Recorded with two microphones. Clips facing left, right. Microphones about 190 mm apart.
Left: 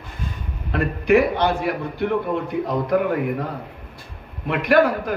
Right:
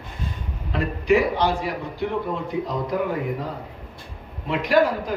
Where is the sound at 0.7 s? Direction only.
60° left (ahead or behind).